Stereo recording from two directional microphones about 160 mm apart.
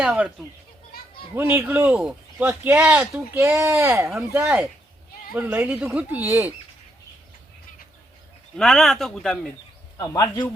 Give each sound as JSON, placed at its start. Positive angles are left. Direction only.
{"t": 0.0, "sound": "a man's voice", "side_deg": -10}
{"t": 1.4, "sound": "a man's voice", "side_deg": -15}
{"t": 8.5, "sound": "a man's voice", "side_deg": 5}
{"t": 10.0, "sound": "speech", "side_deg": 20}